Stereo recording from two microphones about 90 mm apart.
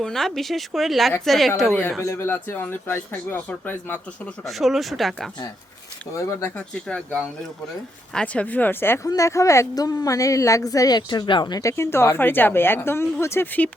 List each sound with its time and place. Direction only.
0.0 s speech: 5° left (ahead or behind)
2.0 s a woman's voice: 30° left (ahead or behind)
4.4 s speech: centre (ahead or behind)
6.1 s a woman's voice: 30° left (ahead or behind)
6.6 s speech: 15° left (ahead or behind)
9.0 s a woman's voice: 35° left (ahead or behind); by 11.6 s 55° left (ahead or behind)
11.6 s a woman's voice: 30° left (ahead or behind)